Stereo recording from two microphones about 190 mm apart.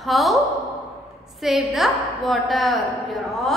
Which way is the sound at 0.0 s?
Centre (ahead or behind).